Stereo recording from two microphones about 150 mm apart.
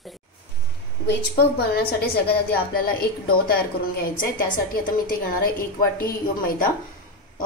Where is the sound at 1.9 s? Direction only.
90° left.